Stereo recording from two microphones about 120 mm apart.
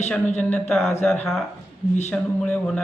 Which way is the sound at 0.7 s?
Centre (ahead or behind).